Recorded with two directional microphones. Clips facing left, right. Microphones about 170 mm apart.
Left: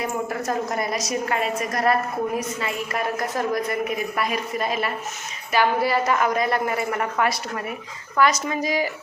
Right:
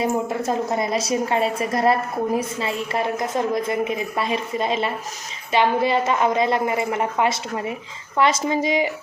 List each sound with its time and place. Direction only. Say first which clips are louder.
0.0 s a woman's voice: right 4 dB; 25° right (ahead or behind)